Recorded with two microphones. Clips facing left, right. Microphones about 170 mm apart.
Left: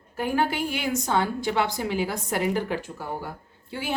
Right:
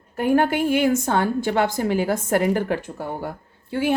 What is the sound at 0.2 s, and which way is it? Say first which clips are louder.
A woman's voice: right 6 dB; 55° right (ahead or behind).